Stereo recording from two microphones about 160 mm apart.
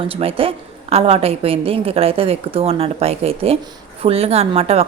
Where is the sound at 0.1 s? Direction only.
35° right (ahead or behind).